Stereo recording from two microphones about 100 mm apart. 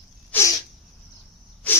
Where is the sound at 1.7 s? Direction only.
15° left (ahead or behind).